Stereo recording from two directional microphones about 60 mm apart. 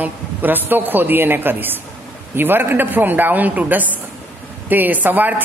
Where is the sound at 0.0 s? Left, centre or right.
Right.